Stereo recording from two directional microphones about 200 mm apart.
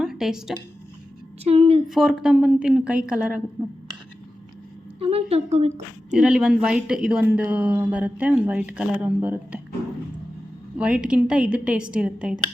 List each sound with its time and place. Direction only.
0.0 s speech: 5° right (ahead or behind)
1.5 s speech: 30° right (ahead or behind)
1.9 s a woman's voice: centre (ahead or behind)
4.9 s a woman's voice: 30° right (ahead or behind)
6.1 s speech: 5° right (ahead or behind)
10.8 s speech: 5° right (ahead or behind)